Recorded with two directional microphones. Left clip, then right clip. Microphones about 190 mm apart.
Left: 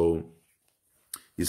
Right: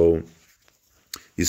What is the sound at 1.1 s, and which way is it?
Clicking, 20° right (ahead or behind).